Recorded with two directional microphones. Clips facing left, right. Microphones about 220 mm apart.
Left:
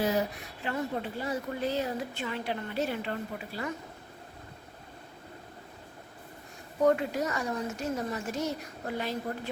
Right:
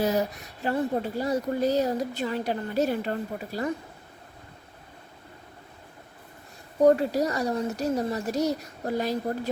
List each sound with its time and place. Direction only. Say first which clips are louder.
0.6 s speech: right 6 dB; 35° right (ahead or behind)
6.8 s speech: right 6 dB; 35° right (ahead or behind)